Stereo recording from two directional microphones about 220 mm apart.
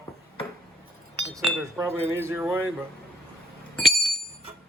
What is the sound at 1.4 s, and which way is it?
Chink, 5° right (ahead or behind).